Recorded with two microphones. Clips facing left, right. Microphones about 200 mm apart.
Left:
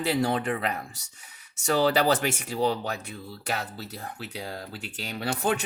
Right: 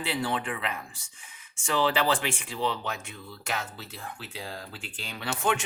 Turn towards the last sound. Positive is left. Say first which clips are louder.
# left 2 dB
turn(degrees=40)  # may be behind; listen again after turning